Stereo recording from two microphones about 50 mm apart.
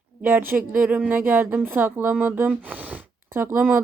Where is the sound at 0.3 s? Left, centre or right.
Right.